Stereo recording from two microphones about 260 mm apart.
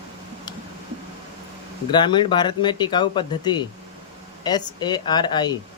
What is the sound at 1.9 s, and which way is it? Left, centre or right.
Speech, centre.